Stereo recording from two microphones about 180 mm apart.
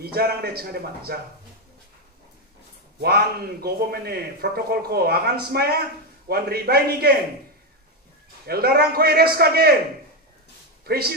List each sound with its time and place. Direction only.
0.0 s a man's voice: 60° right (ahead or behind)
3.0 s a man's voice: 60° right (ahead or behind)
8.5 s a man's voice: 60° right (ahead or behind)
10.9 s a man's voice: 60° right (ahead or behind)